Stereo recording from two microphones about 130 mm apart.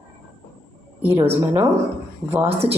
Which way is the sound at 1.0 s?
15° right (ahead or behind).